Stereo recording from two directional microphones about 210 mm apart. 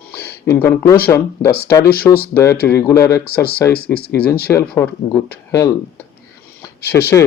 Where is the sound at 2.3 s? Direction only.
10° left (ahead or behind).